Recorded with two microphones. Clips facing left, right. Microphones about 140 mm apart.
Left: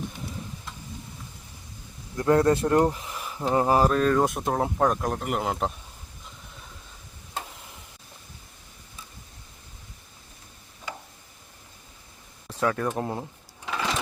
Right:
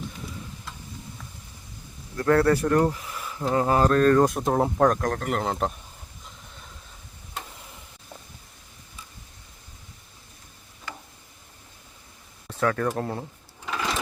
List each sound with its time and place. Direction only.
2.1 s speech: 20° left (ahead or behind); by 5.7 s 5° left (ahead or behind)
12.5 s a sound: 15° left (ahead or behind)
13.0 s speech: 20° left (ahead or behind)